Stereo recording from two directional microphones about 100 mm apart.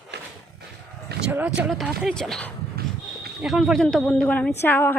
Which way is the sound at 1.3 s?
15° right (ahead or behind).